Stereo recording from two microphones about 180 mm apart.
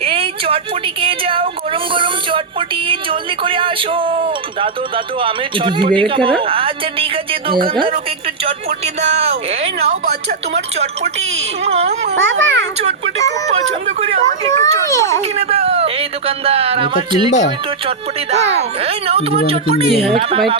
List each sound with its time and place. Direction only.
0.0 s a sound: 30° right (ahead or behind)
1.0 s speech: 30° right (ahead or behind)
10.5 s speech: 35° right (ahead or behind)
12.1 s a child's voice: 90° right
14.0 s speech: 40° right (ahead or behind)
14.8 s speech: 15° left (ahead or behind)
15.4 s speech: 35° right (ahead or behind)